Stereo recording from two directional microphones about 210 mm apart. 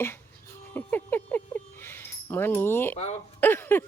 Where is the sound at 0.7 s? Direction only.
10° left (ahead or behind).